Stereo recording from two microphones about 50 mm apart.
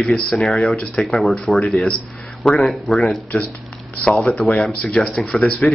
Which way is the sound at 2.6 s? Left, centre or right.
Centre.